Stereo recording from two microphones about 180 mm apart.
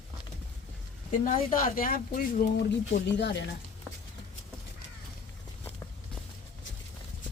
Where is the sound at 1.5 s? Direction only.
50° left (ahead or behind).